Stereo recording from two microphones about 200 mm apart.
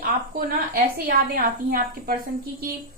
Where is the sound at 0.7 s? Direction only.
45° right (ahead or behind).